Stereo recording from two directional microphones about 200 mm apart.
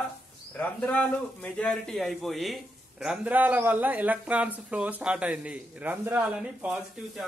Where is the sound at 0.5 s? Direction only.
10° left (ahead or behind).